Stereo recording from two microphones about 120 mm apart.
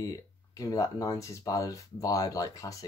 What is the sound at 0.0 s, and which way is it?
Speech, 30° left (ahead or behind).